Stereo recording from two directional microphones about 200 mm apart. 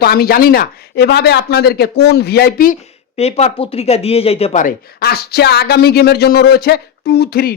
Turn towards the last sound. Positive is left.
turn(degrees=50)  # may be behind; listen again after turning